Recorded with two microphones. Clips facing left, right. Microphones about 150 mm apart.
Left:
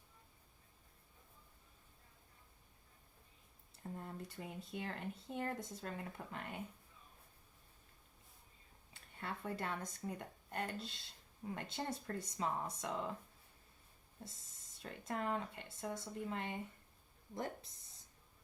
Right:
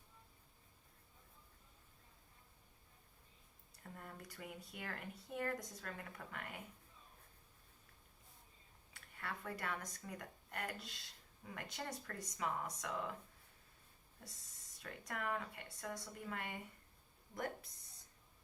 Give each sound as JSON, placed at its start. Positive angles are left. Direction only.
{"t": 3.8, "sound": "speech", "side_deg": 25}
{"t": 8.9, "sound": "speech", "side_deg": 25}
{"t": 14.2, "sound": "speech", "side_deg": 25}